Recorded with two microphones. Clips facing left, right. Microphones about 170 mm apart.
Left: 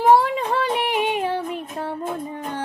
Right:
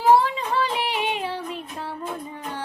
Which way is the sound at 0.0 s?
50° left (ahead or behind).